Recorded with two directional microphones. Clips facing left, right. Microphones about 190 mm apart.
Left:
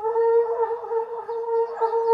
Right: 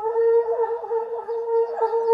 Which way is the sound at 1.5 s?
40° right (ahead or behind).